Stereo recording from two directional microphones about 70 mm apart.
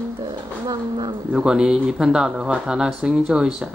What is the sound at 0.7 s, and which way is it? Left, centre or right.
Speech, right.